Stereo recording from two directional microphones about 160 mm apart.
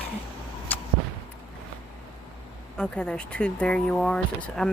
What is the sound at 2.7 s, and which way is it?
Speech, 5° left (ahead or behind).